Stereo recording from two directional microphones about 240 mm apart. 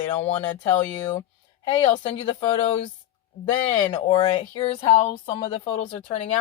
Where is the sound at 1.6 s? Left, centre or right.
Left.